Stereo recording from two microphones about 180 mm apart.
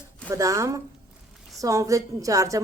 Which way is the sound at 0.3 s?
15° right (ahead or behind).